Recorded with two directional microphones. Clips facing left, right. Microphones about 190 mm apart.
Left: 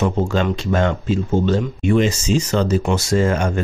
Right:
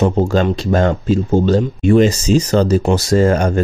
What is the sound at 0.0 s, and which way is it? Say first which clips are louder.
Speech: right 4 dB; 35° right (ahead or behind).